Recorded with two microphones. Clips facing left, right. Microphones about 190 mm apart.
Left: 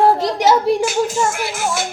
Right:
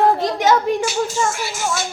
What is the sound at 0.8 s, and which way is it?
Speech, 55° left (ahead or behind).